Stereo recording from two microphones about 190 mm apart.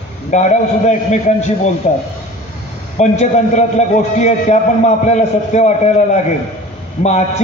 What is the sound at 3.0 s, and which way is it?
A man's voice, 40° left (ahead or behind).